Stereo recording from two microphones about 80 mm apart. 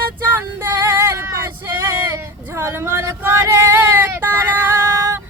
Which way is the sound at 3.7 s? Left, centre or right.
Right.